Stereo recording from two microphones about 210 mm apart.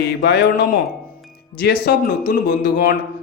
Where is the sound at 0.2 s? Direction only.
50° left (ahead or behind).